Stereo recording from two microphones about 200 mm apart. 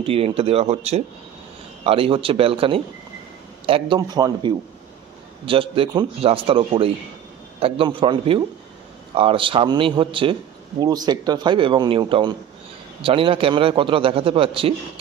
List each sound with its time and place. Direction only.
0.0 s a man's voice: 30° right (ahead or behind)